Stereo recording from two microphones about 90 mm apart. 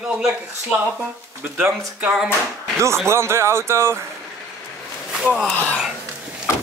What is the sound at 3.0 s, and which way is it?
Speech, 30° right (ahead or behind).